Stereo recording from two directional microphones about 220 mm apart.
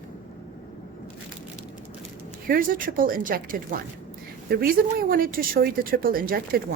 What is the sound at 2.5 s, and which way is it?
Speech, 40° right (ahead or behind).